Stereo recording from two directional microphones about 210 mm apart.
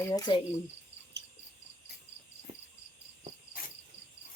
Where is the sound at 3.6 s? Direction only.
40° left (ahead or behind).